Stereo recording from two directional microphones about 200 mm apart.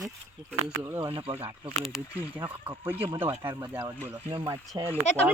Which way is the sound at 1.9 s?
10° right (ahead or behind).